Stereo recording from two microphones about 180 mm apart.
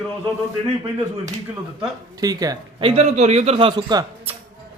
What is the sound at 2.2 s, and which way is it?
A man's voice, 20° right (ahead or behind).